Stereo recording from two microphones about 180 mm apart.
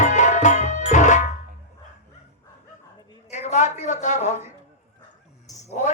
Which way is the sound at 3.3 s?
40° left (ahead or behind).